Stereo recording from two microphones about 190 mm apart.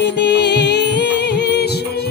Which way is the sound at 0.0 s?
65° left (ahead or behind).